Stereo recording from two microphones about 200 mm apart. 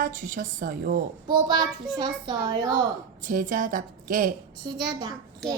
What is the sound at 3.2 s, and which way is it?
A woman's voice, 45° right (ahead or behind).